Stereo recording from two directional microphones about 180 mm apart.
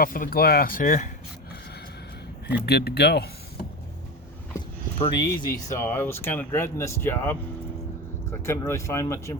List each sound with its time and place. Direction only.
0.0 s speech: 55° left (ahead or behind)
2.5 s speech: 65° left (ahead or behind)
4.9 s speech: 25° left (ahead or behind)